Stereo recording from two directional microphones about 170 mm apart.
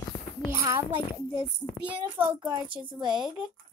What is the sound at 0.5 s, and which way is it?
Speech, 15° right (ahead or behind).